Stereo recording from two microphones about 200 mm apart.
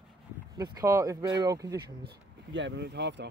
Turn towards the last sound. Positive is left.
turn(degrees=-60)  # may be behind; listen again after turning